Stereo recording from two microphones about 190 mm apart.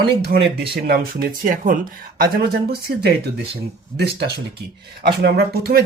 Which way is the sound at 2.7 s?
60° right (ahead or behind).